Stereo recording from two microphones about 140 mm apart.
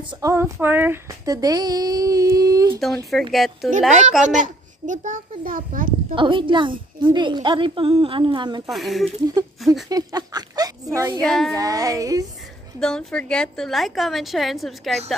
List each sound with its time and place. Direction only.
0.0 s speech: 35° right (ahead or behind)
0.3 s speech: 15° right (ahead or behind)
1.2 s speech: 25° right (ahead or behind)
3.1 s a woman's voice: centre (ahead or behind)
4.4 s a child's voice: 65° right (ahead or behind)
6.1 s a woman's voice: 35° right (ahead or behind)
8.6 s a woman's voice: centre (ahead or behind)
9.4 s child singing: 25° right (ahead or behind)
9.8 s a sound: 25° right (ahead or behind)
11.2 s a woman's voice: 5° left (ahead or behind)
11.5 s child singing: 25° right (ahead or behind)
12.8 s a woman's voice: 5° left (ahead or behind)